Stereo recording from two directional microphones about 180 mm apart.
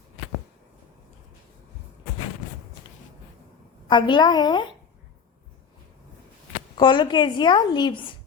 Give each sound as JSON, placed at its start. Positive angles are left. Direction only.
{"t": 3.8, "sound": "speech", "side_deg": 25}
{"t": 6.7, "sound": "speech", "side_deg": 25}